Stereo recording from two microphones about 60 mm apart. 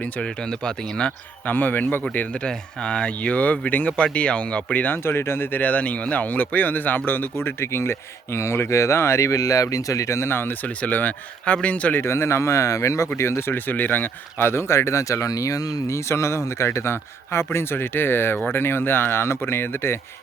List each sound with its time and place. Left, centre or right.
0.0 s speech: centre
1.5 s speech: left
5.0 s speech: left
5.6 s speech: left
10.7 s speech: left
11.9 s speech: left
13.1 s speech: left
13.7 s speech: left
16.0 s speech: left